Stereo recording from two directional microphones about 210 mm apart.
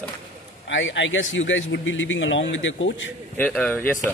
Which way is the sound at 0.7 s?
60° left (ahead or behind).